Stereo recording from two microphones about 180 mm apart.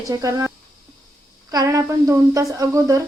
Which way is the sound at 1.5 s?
20° right (ahead or behind).